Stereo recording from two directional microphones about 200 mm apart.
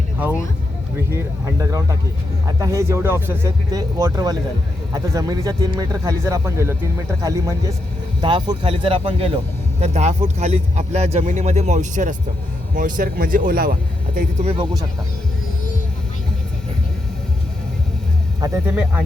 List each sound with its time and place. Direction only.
0.9 s a man's voice: 15° right (ahead or behind); by 13.7 s 45° right (ahead or behind)
14.4 s speech: 20° right (ahead or behind)
18.3 s speech: 15° right (ahead or behind)